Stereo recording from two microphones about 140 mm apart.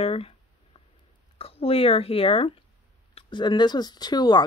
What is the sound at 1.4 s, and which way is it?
Speech, 45° left (ahead or behind).